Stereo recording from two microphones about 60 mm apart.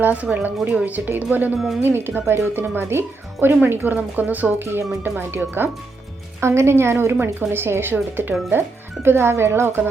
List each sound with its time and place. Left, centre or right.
0.0 s a woman's voice: right
1.5 s speech: centre
1.8 s speech: right
6.4 s a woman's voice: right